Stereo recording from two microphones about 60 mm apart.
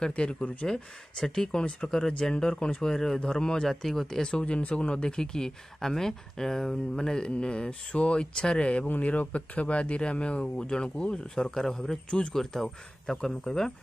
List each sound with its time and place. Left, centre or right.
0.0 s speech: centre